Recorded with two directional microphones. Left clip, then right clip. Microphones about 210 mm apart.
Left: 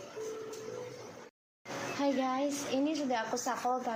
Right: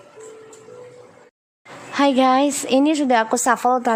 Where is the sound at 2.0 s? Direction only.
50° right (ahead or behind).